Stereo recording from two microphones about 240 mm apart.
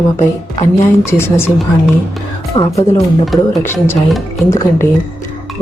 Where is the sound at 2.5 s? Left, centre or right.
Left.